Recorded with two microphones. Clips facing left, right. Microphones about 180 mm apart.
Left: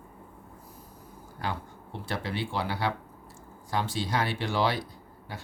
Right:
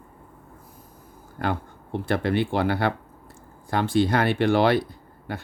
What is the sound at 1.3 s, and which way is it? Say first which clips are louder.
Speech: right 7 dB; 55° right (ahead or behind).